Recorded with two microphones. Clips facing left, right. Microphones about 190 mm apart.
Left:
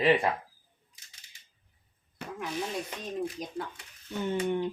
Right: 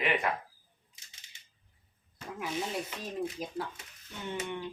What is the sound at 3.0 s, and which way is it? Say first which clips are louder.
Speech: left 2 dB; 5° right (ahead or behind).